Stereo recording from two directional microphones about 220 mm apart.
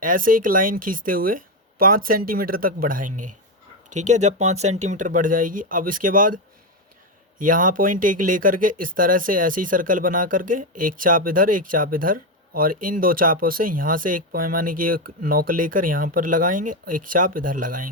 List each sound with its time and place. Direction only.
0.0 s speech: 40° right (ahead or behind)